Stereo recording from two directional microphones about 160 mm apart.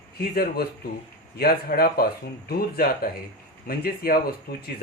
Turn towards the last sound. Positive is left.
turn(degrees=70)  # may be behind; listen again after turning